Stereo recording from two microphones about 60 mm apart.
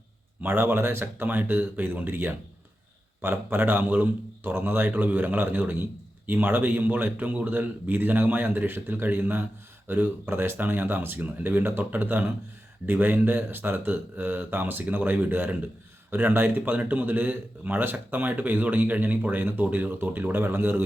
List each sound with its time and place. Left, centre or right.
0.4 s a man's voice: right